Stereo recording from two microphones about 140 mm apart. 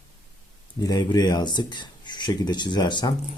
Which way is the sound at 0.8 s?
30° left (ahead or behind).